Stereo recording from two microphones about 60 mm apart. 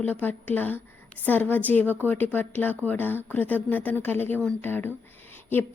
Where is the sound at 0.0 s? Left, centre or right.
Left.